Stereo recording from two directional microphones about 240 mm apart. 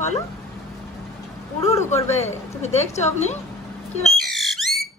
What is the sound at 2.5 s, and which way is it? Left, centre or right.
Speech, left.